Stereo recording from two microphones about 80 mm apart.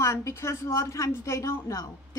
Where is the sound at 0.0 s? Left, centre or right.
Left.